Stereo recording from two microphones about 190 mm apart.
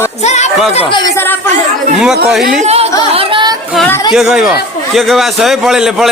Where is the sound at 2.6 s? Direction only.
35° right (ahead or behind).